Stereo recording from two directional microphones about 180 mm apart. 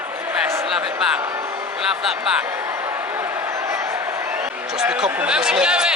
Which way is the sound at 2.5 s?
10° right (ahead or behind).